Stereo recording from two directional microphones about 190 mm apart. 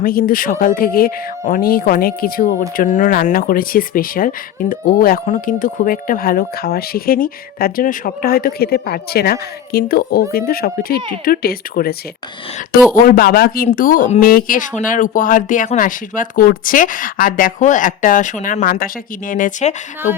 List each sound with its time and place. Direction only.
0.0 s speech: 50° left (ahead or behind)